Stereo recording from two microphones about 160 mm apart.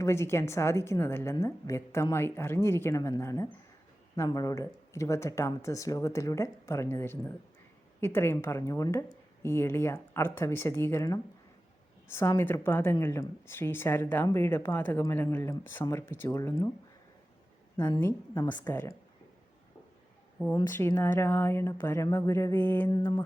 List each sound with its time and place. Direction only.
0.0 s speech: 15° left (ahead or behind)
17.7 s a woman's voice: 25° left (ahead or behind)
18.7 s speech: 15° left (ahead or behind)
20.5 s speech: 15° left (ahead or behind)